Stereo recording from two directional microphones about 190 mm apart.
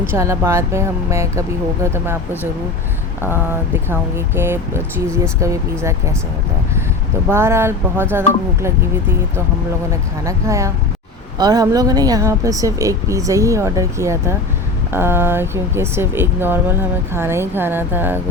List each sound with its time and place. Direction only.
0.1 s speech: 15° right (ahead or behind)
3.2 s a sound: 10° right (ahead or behind)
4.4 s speech: 10° right (ahead or behind)
7.3 s speech: 15° right (ahead or behind)
10.2 s speech: 15° right (ahead or behind)